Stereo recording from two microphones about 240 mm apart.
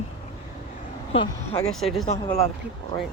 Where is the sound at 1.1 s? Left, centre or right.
Left.